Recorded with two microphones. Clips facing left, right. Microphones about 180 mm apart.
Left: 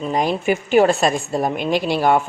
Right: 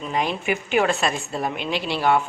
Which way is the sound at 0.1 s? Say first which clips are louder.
Left 5 dB; 40° left (ahead or behind).